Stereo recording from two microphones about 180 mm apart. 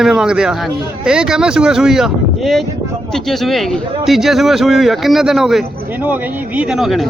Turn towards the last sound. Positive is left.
turn(degrees=0)  # may be behind; listen again after turning